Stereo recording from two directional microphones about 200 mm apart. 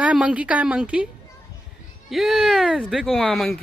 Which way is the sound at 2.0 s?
Centre (ahead or behind).